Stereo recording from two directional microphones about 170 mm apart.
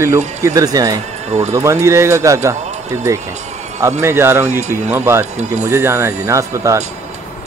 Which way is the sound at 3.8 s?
20° right (ahead or behind).